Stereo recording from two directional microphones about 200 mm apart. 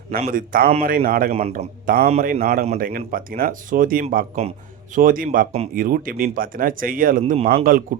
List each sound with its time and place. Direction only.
0.2 s speech: 45° right (ahead or behind)
1.3 s speech: 30° right (ahead or behind)
2.3 s speech: 45° right (ahead or behind)
4.4 s speech: 30° right (ahead or behind)
4.9 s speech: 45° right (ahead or behind)
5.5 s speech: 30° right (ahead or behind)
5.8 s speech: 45° right (ahead or behind)